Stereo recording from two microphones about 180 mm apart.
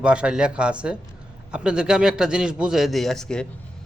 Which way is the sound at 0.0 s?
5° right (ahead or behind).